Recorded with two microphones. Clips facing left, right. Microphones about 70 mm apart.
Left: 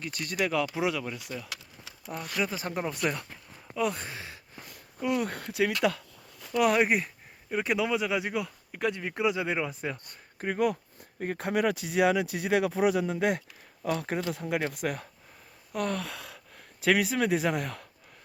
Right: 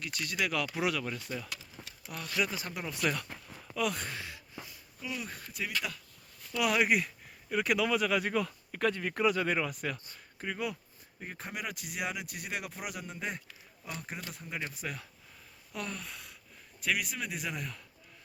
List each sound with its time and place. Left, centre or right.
0.0 s speech: left
0.6 s speech: centre
1.3 s speech: centre
1.8 s a sound: right
2.4 s speech: left
3.7 s a sound: left
4.6 s speech: left
6.6 s speech: left
10.3 s speech: left
11.2 s speech: left
15.7 s a sound: left
16.0 s gasp: left
16.8 s speech: left